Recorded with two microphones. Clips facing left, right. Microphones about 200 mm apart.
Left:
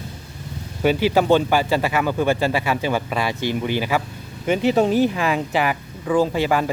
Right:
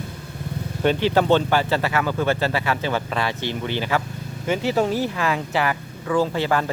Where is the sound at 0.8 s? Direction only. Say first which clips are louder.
Left 1 dB; 5° left (ahead or behind).